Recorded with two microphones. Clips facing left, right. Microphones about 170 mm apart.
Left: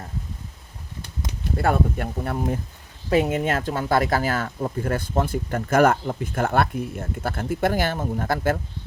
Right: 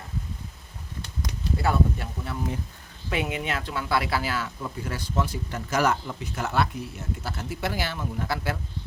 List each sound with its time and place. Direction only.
1.5 s speech: 50° left (ahead or behind)
3.1 s speech: 40° left (ahead or behind)